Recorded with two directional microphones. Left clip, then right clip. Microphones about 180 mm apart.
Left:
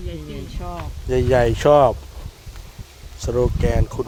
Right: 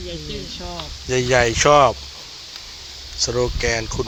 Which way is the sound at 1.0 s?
30° left (ahead or behind).